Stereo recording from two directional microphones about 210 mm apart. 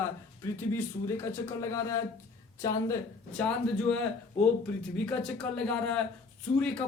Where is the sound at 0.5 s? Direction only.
10° left (ahead or behind).